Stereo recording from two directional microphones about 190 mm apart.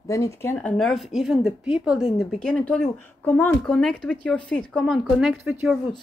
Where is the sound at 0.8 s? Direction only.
Centre (ahead or behind).